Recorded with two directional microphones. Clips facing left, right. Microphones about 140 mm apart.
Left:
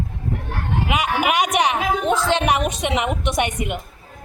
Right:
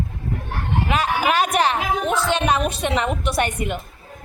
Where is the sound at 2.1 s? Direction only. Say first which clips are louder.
Left 1 dB; 90° left.